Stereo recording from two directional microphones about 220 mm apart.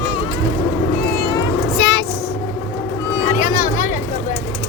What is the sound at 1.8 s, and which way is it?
Vehicle, 55° left (ahead or behind).